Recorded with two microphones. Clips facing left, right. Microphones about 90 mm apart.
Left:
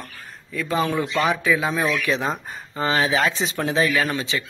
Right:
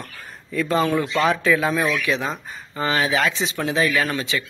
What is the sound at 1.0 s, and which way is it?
Speech, 20° left (ahead or behind).